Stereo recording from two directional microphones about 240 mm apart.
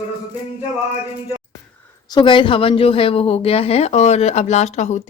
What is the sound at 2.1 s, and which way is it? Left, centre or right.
Speech, left.